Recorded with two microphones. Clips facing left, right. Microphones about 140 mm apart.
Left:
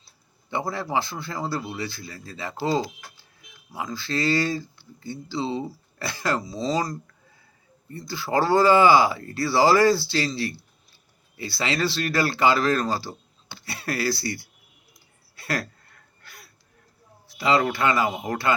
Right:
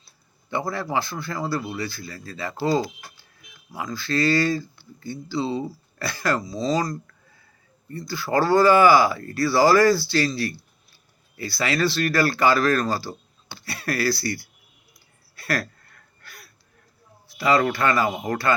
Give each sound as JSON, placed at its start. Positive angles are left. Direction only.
{"t": 0.5, "sound": "speech", "side_deg": 20}
{"t": 3.7, "sound": "speech", "side_deg": 20}
{"t": 15.4, "sound": "a sound", "side_deg": 20}
{"t": 17.3, "sound": "speech", "side_deg": 25}